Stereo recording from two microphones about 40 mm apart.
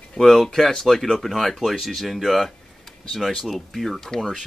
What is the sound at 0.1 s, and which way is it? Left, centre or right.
Speech, centre.